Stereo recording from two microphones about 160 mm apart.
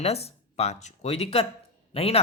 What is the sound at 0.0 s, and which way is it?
Speech, 40° left (ahead or behind).